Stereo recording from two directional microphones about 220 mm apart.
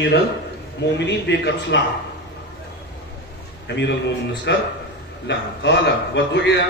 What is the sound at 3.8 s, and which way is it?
A man's voice, 55° left (ahead or behind).